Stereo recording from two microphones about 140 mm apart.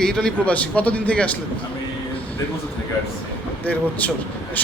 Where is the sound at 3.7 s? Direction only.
10° left (ahead or behind).